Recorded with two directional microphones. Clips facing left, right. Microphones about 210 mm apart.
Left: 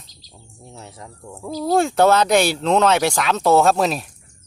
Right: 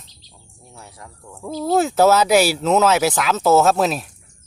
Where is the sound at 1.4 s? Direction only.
Centre (ahead or behind).